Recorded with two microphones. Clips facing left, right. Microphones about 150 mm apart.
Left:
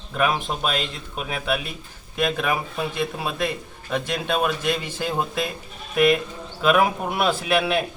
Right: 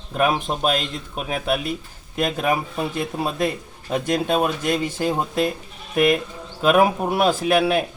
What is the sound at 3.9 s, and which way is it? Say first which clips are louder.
Speech: right 4 dB; 40° right (ahead or behind).